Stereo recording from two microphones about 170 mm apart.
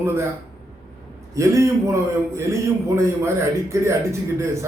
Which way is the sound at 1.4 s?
15° right (ahead or behind).